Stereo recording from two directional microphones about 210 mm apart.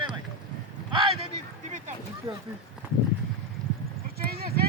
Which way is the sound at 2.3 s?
15° right (ahead or behind).